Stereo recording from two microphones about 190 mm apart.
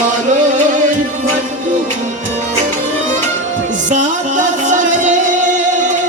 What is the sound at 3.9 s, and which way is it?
Music, 40° right (ahead or behind).